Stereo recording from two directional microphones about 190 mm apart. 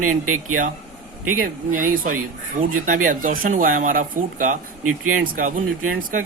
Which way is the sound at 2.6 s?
45° right (ahead or behind).